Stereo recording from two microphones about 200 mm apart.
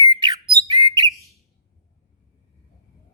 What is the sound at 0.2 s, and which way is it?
Bird, 20° right (ahead or behind).